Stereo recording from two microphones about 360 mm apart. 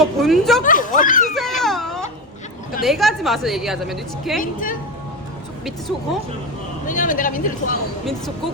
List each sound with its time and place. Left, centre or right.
0.0 s a woman's voice: centre
0.6 s speech: left
1.3 s baby cry: centre
2.8 s a woman's voice: centre
4.4 s speech: left
6.8 s speech: left